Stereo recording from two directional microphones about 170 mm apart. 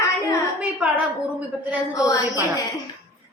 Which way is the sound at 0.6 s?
5° right (ahead or behind).